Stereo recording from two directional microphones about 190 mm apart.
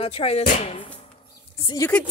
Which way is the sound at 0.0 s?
30° left (ahead or behind).